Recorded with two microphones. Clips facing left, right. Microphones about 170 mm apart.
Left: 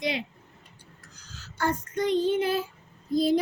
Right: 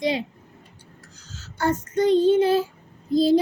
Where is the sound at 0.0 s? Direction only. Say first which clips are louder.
Right 6 dB; 30° right (ahead or behind).